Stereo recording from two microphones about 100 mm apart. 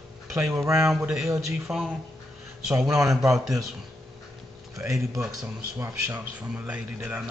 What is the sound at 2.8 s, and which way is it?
Speech, 30° right (ahead or behind).